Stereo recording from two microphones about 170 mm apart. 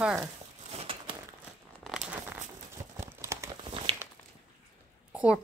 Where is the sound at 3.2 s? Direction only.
15° right (ahead or behind).